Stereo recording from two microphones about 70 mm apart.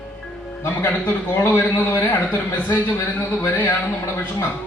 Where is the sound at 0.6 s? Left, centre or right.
Left.